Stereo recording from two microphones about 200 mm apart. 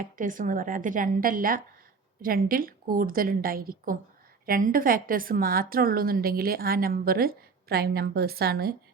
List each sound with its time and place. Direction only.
0.0 s a woman's voice: 40° right (ahead or behind)